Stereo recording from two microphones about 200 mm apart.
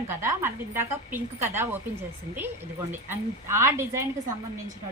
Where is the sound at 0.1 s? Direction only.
15° right (ahead or behind).